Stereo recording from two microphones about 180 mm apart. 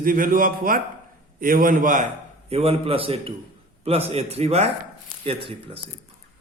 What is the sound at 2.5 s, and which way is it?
Speech, 35° right (ahead or behind).